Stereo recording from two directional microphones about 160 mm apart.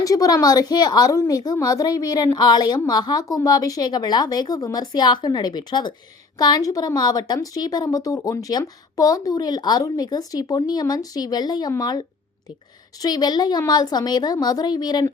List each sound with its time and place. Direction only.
0.0 s a woman's voice: 20° left (ahead or behind)